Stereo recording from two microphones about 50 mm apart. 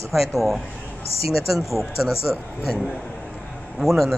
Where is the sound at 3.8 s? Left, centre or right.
Centre.